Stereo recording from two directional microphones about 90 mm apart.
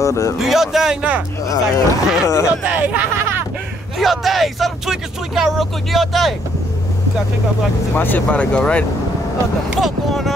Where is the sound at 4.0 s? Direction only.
Centre (ahead or behind).